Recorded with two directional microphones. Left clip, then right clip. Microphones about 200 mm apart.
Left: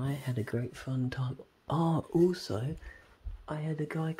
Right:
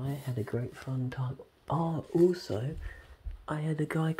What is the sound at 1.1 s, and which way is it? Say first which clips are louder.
Speech: left 1 dB; 50° left (ahead or behind).